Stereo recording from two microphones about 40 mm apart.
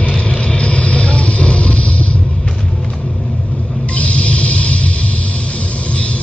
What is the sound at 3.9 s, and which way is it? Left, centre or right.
Vehicle, left.